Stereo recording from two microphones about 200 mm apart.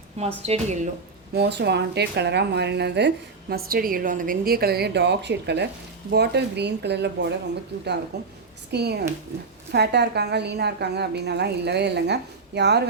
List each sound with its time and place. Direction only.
0.4 s speech: 30° right (ahead or behind)
1.3 s a woman's voice: 55° right (ahead or behind)